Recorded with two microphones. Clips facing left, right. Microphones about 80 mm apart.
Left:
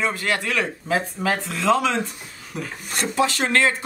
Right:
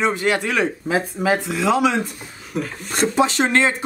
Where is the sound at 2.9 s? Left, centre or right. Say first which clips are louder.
Right 4 dB; right.